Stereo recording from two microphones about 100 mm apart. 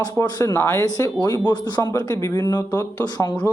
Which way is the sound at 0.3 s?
40° left (ahead or behind).